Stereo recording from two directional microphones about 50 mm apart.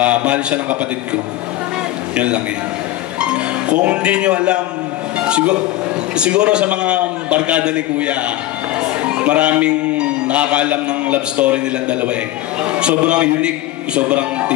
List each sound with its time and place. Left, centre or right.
0.0 s a man's voice: right
2.1 s a man's voice: right
8.8 s music: right
12.7 s a man's voice: right